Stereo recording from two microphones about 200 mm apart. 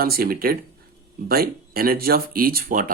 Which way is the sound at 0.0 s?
50° right (ahead or behind).